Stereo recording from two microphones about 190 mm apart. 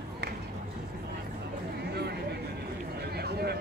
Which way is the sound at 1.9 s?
60° right (ahead or behind).